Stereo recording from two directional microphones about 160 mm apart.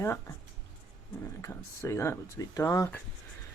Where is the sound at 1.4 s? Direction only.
15° left (ahead or behind).